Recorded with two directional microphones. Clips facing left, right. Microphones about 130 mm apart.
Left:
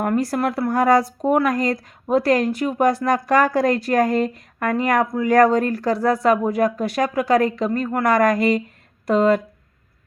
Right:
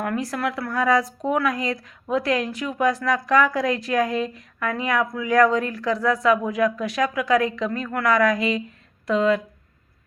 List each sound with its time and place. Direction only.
0.0 s speech: 35° left (ahead or behind)